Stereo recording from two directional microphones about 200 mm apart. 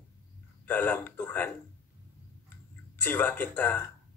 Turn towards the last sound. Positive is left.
turn(degrees=10)  # may be behind; listen again after turning